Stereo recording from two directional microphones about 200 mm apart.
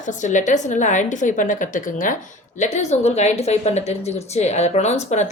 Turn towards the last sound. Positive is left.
turn(degrees=35)  # may be behind; listen again after turning